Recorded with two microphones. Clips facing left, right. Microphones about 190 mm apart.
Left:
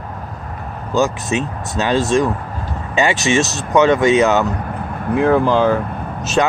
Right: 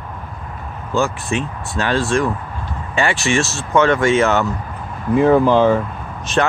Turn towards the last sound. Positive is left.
turn(degrees=5)  # may be behind; listen again after turning